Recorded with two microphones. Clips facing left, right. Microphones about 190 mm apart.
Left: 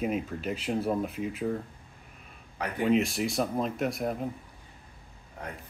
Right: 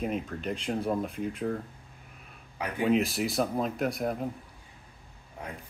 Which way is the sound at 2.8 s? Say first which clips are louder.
Even; centre (ahead or behind).